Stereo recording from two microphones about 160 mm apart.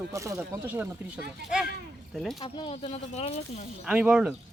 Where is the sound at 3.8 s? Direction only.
5° right (ahead or behind).